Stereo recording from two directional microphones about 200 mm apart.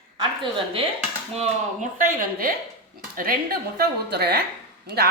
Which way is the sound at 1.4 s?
40° right (ahead or behind).